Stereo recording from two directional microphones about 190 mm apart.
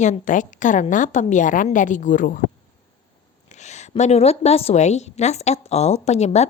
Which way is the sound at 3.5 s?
35° left (ahead or behind).